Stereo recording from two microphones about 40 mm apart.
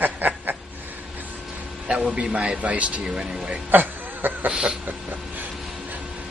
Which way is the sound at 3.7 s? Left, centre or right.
Right.